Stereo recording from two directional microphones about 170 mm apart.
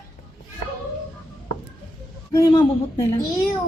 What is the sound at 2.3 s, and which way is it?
Speech, 20° left (ahead or behind).